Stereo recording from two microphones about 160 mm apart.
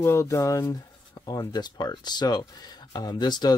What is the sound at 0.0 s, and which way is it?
Speech, 15° left (ahead or behind).